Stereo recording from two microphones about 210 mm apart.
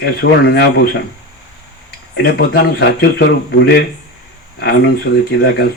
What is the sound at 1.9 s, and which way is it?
Speech, 50° left (ahead or behind).